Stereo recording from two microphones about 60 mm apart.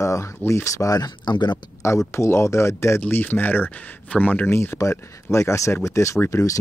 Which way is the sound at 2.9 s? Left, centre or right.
Left.